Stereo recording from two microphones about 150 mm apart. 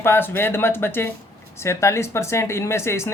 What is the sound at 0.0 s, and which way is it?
Speech, 15° left (ahead or behind).